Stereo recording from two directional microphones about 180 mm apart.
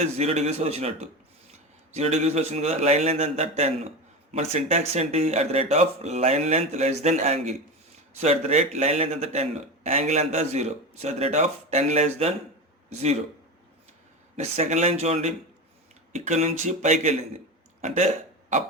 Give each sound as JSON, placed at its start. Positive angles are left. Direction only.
{"t": 0.0, "sound": "a man's voice", "side_deg": -35}
{"t": 14.3, "sound": "a man's voice", "side_deg": -35}
{"t": 17.7, "sound": "burping", "side_deg": -40}